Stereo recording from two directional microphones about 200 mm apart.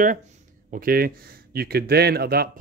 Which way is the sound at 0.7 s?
45° right (ahead or behind).